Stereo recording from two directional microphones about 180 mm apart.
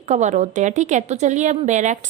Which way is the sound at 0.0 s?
40° right (ahead or behind).